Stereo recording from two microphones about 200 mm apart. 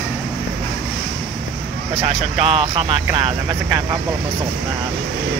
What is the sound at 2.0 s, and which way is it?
Speech, 30° right (ahead or behind).